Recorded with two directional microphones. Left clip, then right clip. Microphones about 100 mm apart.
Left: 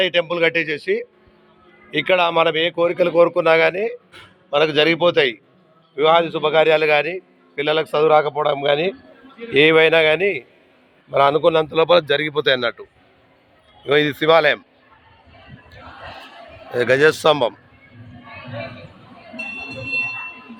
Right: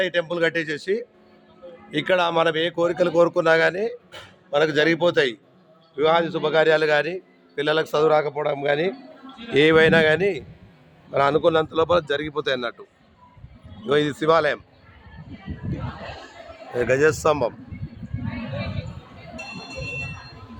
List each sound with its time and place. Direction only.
0.0 s a man's voice: centre (ahead or behind); by 8.1 s 20° right (ahead or behind)
8.1 s a man's voice: centre (ahead or behind)
9.5 s a man's voice: 20° right (ahead or behind)
11.9 s speech: 15° left (ahead or behind)
13.8 s speech: 5° left (ahead or behind)
16.7 s speech: 25° left (ahead or behind)